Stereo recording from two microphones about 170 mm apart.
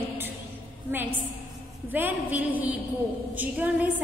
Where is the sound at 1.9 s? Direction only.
10° right (ahead or behind).